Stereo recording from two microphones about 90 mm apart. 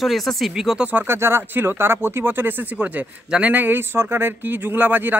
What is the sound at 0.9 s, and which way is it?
Speech, 25° right (ahead or behind).